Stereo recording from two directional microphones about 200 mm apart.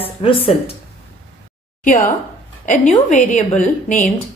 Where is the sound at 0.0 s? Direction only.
30° left (ahead or behind).